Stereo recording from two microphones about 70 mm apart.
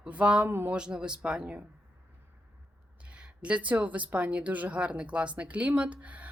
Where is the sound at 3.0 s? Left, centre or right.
Centre.